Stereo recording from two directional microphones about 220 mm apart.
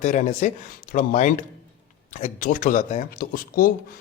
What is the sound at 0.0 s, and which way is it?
Speech, 35° left (ahead or behind).